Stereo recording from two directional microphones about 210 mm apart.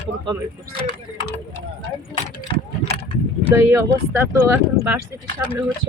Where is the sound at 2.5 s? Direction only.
25° left (ahead or behind).